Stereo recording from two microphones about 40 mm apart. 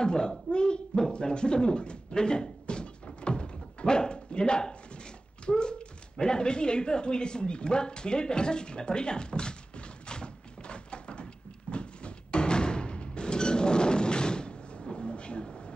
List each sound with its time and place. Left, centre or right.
0.0 s speech: centre
1.1 s a sound: left
5.4 s a woman's voice: left
11.7 s music: left